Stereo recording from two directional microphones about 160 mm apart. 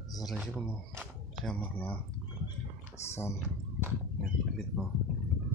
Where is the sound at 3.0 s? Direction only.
15° left (ahead or behind).